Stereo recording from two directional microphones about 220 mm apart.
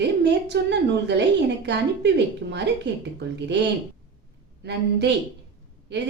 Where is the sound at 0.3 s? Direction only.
50° right (ahead or behind).